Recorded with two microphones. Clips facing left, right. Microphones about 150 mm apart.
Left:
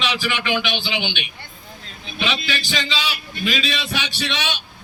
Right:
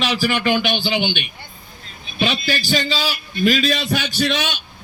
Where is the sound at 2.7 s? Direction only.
45° right (ahead or behind).